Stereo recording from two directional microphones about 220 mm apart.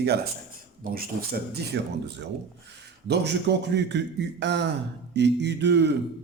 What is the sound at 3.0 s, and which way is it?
A man's voice, 50° right (ahead or behind).